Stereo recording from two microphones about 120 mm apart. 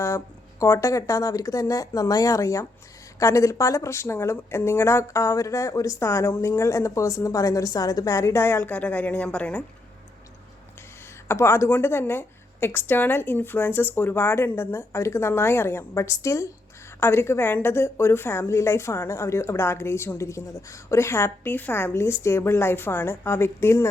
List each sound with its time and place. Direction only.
0.6 s a woman's voice: 25° left (ahead or behind)
11.3 s a woman's voice: 20° left (ahead or behind)